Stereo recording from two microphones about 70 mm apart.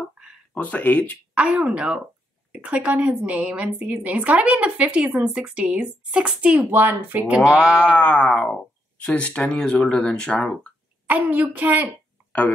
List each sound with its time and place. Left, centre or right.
0.6 s speech: left
1.3 s a woman's voice: centre
7.9 s speech: centre
11.1 s a woman's voice: right
12.3 s speech: left